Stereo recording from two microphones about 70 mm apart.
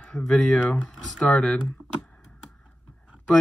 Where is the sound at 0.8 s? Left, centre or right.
Centre.